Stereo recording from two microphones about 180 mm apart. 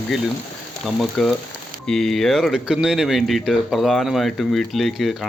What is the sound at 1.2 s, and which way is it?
Speech, centre (ahead or behind).